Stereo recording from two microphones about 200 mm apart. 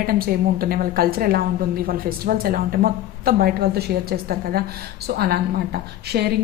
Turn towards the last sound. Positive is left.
turn(degrees=-50)  # may be behind; listen again after turning